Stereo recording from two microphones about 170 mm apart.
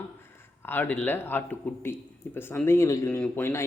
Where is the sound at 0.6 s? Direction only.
10° left (ahead or behind).